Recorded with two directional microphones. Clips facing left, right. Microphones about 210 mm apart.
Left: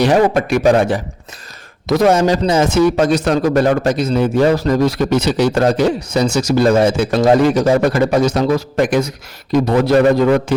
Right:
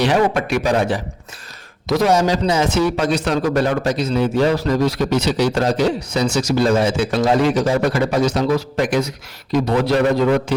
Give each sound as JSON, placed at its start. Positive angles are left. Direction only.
{"t": 0.0, "sound": "a man's voice", "side_deg": 45}